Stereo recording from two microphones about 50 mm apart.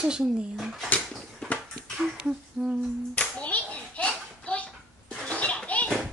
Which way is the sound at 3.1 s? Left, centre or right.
Left.